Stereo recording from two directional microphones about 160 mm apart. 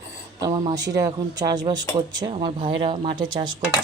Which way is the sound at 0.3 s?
25° right (ahead or behind).